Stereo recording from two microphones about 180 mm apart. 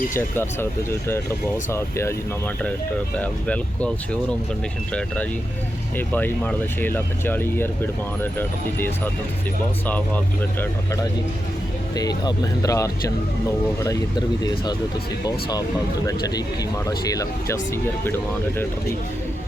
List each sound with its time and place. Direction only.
0.1 s speech: 10° left (ahead or behind)
3.2 s speech: 5° left (ahead or behind)
6.0 s speech: 10° left (ahead or behind)
11.9 s speech: 20° left (ahead or behind)